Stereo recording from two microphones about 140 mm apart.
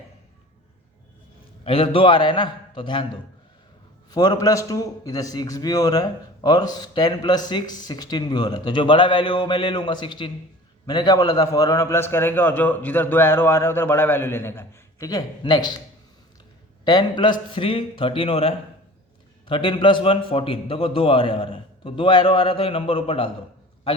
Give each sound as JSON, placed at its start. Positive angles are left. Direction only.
{"t": 1.6, "sound": "a man's voice", "side_deg": 40}
{"t": 4.1, "sound": "a man's voice", "side_deg": 30}
{"t": 16.8, "sound": "a man's voice", "side_deg": 30}